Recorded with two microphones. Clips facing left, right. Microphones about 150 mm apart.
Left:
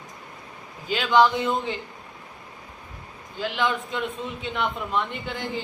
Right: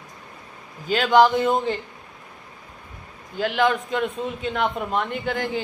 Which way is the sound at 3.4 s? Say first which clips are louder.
Right 5 dB; 55° right (ahead or behind).